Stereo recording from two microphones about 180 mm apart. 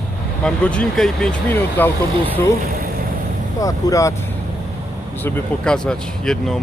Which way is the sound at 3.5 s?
20° left (ahead or behind).